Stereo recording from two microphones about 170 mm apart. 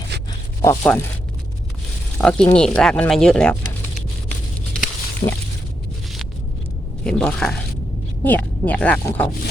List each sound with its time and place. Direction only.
0.1 s zipper: 85° right
0.6 s speech: 15° left (ahead or behind)
2.1 s speech: 5° left (ahead or behind)
7.0 s speech: 5° left (ahead or behind)